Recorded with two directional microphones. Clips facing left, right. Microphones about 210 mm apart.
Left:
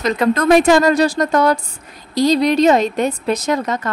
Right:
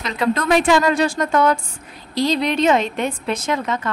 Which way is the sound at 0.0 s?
45° left (ahead or behind).